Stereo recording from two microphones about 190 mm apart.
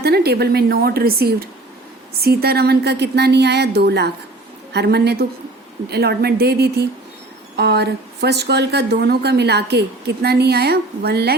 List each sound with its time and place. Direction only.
0.0 s speech: 55° right (ahead or behind)